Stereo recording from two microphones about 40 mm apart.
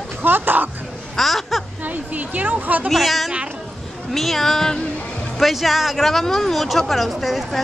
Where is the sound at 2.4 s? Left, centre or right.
Right.